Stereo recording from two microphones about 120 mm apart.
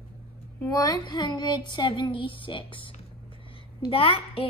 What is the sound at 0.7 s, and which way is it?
Speech, 30° left (ahead or behind).